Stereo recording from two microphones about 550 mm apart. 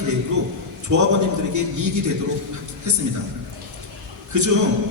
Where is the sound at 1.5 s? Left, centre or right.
Right.